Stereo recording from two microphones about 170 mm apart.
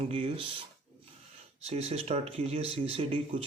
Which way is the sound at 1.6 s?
35° right (ahead or behind).